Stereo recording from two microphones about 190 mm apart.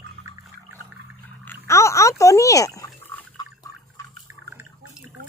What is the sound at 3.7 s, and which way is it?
Drip, 20° left (ahead or behind).